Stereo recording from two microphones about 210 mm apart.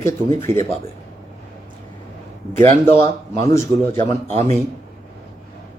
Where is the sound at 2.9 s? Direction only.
15° left (ahead or behind).